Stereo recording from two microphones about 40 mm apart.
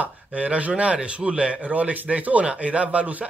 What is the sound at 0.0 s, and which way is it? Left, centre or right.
Speech, right.